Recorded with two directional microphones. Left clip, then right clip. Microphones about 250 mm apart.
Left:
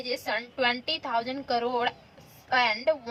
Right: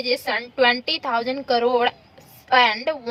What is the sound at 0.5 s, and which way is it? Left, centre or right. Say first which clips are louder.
A woman's voice: right 10 dB; right.